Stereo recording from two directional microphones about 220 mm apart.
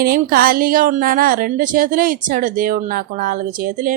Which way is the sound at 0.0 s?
40° right (ahead or behind).